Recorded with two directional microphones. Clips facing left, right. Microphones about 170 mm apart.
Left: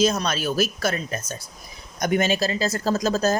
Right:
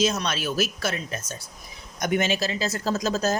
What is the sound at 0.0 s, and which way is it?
Speech, 40° left (ahead or behind).